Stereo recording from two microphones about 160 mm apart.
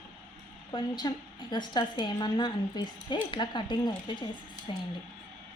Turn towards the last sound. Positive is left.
turn(degrees=30)  # may be behind; listen again after turning